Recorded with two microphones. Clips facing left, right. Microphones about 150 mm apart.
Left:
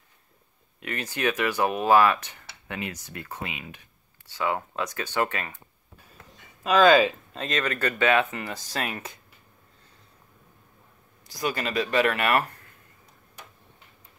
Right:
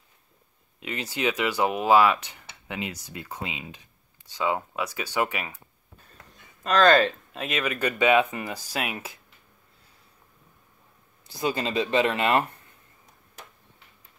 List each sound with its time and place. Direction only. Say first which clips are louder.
0.7 s speech: even; 15° right (ahead or behind)
6.6 s speech: left 1 dB; 5° left (ahead or behind)
7.4 s speech: even; 10° right (ahead or behind)
11.3 s speech: right 1 dB; 25° right (ahead or behind)